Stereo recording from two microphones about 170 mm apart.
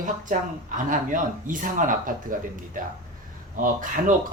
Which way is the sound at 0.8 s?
50° right (ahead or behind).